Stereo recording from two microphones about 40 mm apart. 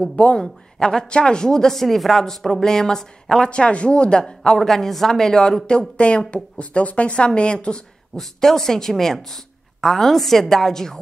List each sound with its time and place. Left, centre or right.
0.1 s speech: left
0.4 s speech: centre
3.4 s speech: left
4.6 s speech: centre; by 7.8 s left
8.2 s speech: centre